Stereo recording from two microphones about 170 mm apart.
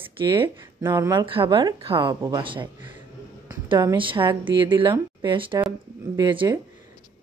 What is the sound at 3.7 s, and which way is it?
Speech, 25° right (ahead or behind).